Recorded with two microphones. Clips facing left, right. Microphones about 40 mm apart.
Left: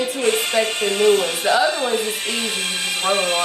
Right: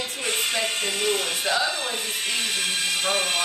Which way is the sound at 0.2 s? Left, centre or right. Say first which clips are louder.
Left 7 dB; centre.